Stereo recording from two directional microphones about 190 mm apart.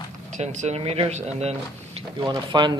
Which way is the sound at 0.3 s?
40° right (ahead or behind).